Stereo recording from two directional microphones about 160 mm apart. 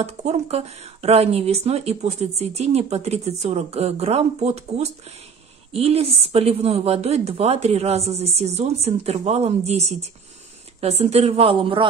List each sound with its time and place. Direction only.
0.0 s speech: 40° right (ahead or behind)